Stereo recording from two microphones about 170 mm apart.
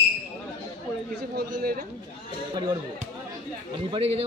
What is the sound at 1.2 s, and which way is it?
Speech, 65° right (ahead or behind).